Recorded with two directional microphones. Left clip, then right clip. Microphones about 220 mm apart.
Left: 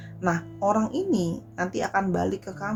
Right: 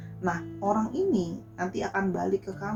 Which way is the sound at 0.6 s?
45° left (ahead or behind).